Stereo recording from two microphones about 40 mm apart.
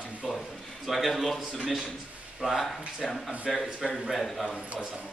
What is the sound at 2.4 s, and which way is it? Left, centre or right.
Speech, centre.